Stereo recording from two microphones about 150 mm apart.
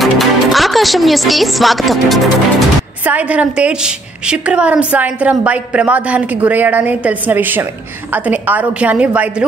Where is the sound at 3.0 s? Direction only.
10° right (ahead or behind).